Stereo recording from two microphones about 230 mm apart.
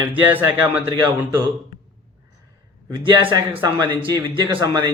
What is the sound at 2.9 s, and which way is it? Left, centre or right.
Speech, right.